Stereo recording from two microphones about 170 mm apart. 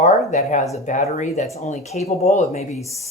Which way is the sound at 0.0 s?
45° left (ahead or behind).